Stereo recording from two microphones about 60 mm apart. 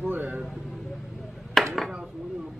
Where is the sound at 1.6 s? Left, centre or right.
Centre.